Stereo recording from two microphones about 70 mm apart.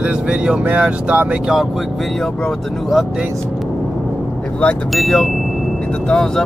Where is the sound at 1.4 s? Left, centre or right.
Centre.